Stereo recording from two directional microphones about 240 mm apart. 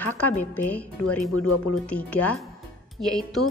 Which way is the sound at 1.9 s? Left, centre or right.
Centre.